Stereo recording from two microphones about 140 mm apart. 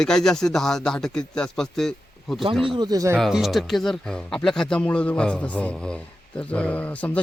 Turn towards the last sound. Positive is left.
turn(degrees=10)  # may be behind; listen again after turning